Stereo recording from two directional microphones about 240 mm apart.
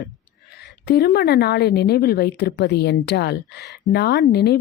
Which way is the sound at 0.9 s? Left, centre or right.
Left.